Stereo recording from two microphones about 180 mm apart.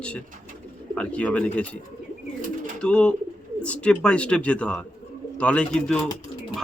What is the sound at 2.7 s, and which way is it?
A man's voice, 5° left (ahead or behind).